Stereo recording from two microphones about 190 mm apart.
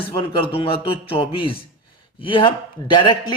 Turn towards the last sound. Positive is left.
turn(degrees=25)  # may be behind; listen again after turning